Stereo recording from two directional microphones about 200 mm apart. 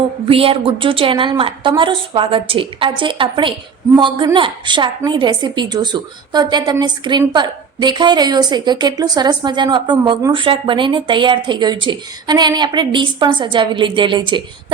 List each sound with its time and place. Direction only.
0.3 s a woman's voice: 30° right (ahead or behind)